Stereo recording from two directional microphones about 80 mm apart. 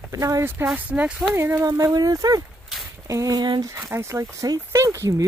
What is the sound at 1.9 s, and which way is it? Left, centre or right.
Speech, right.